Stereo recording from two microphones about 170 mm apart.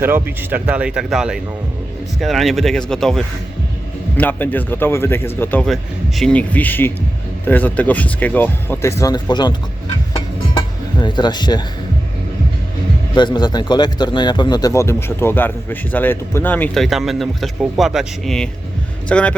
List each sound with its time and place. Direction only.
0.0 s speech: 10° right (ahead or behind); by 5.6 s 10° left (ahead or behind)
5.6 s speech: centre (ahead or behind); by 9.6 s 25° left (ahead or behind)
11.0 s speech: 25° left (ahead or behind)
13.1 s speech: 25° left (ahead or behind); by 19.3 s 5° left (ahead or behind)